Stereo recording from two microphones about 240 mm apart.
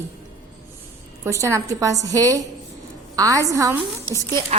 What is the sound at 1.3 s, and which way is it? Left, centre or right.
A woman's voice, centre.